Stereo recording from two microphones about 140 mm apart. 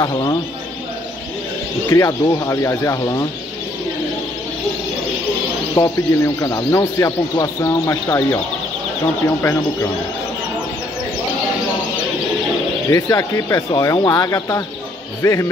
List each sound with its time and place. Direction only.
0.0 s speech: 25° left (ahead or behind)
1.9 s speech: 25° left (ahead or behind)
5.8 s speech: 25° left (ahead or behind)
12.9 s speech: 25° left (ahead or behind)